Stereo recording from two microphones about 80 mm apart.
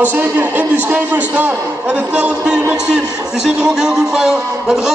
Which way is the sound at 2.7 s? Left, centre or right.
Centre.